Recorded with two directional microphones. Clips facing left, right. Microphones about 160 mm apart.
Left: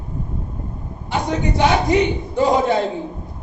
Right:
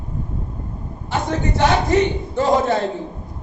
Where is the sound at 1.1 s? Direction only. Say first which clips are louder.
Left 1 dB; 15° left (ahead or behind).